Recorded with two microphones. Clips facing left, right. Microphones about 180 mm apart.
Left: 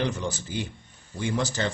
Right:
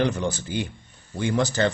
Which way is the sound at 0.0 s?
60° right (ahead or behind).